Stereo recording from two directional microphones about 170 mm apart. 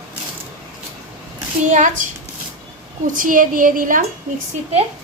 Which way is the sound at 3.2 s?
55° right (ahead or behind).